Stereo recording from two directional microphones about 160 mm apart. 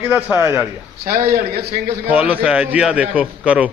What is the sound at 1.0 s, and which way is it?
Speech, 65° right (ahead or behind).